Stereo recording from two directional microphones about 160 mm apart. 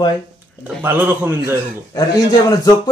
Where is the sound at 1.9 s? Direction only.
25° left (ahead or behind).